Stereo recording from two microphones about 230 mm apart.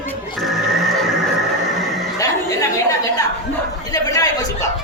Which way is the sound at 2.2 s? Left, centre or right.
Centre.